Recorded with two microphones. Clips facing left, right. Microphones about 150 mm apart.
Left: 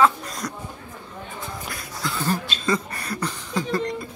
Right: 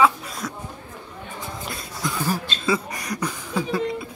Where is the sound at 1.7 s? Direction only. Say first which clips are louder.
Right 2 dB; 20° right (ahead or behind).